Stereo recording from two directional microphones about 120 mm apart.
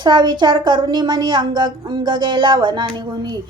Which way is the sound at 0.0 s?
35° right (ahead or behind).